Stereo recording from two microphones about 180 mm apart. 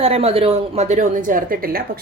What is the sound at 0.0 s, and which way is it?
A woman's voice, 35° right (ahead or behind).